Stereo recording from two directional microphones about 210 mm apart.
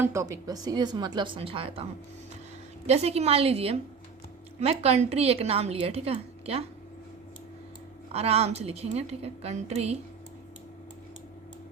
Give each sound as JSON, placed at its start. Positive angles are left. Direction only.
{"t": 0.0, "sound": "a woman's voice", "side_deg": -15}
{"t": 8.1, "sound": "a woman's voice", "side_deg": -30}